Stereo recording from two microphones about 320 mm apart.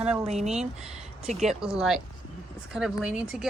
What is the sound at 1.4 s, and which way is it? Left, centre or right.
Speech, centre.